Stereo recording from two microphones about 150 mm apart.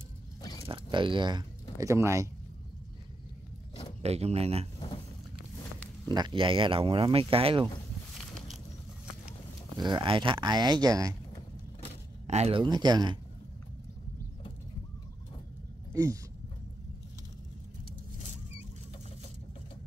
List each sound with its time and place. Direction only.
0.4 s zipper: 25° left (ahead or behind)
0.7 s speech: 35° right (ahead or behind)
4.0 s speech: 45° right (ahead or behind)
4.7 s a sound: 35° left (ahead or behind)
6.1 s speech: 30° right (ahead or behind)
8.2 s a sound: centre (ahead or behind)
9.8 s speech: 30° right (ahead or behind)
12.3 s speech: 45° right (ahead or behind)
12.6 s speech: 30° right (ahead or behind)
15.9 s speech: 20° right (ahead or behind)